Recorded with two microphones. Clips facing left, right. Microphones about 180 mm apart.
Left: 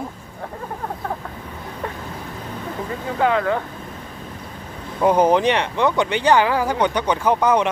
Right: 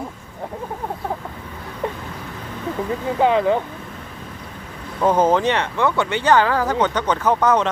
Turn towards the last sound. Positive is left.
turn(degrees=10)  # may be behind; listen again after turning